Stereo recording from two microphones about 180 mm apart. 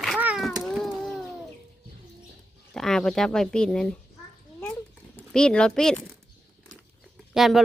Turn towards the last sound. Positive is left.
turn(degrees=0)  # may be behind; listen again after turning